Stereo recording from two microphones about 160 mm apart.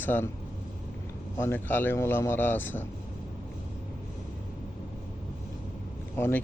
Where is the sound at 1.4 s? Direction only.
15° left (ahead or behind).